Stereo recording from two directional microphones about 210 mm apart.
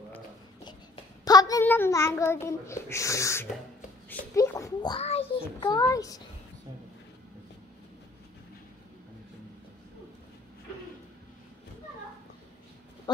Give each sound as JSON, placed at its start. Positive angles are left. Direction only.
{"t": 1.2, "sound": "child singing", "side_deg": 20}
{"t": 2.4, "sound": "a child's voice", "side_deg": 15}